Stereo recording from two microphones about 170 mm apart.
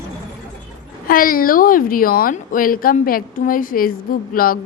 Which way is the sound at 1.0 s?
55° left (ahead or behind).